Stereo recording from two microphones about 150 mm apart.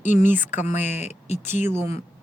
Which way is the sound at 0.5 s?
50° left (ahead or behind).